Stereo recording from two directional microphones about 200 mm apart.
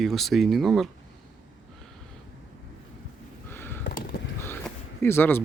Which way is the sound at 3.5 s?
10° left (ahead or behind).